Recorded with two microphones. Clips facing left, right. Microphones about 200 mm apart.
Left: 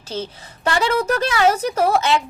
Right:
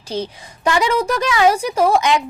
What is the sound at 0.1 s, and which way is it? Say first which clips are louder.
Speech: right 3 dB; 15° right (ahead or behind).